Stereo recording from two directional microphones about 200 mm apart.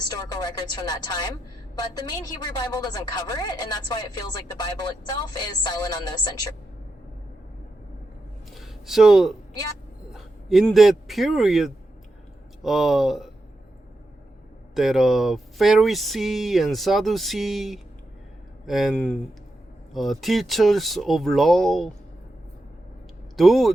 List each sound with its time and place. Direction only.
0.1 s a woman's voice: 20° left (ahead or behind)
8.5 s a sound: centre (ahead or behind)
10.1 s speech: centre (ahead or behind)
14.8 s speech: centre (ahead or behind)
23.4 s speech: centre (ahead or behind)